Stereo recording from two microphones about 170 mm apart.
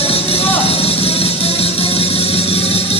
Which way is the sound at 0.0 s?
35° left (ahead or behind).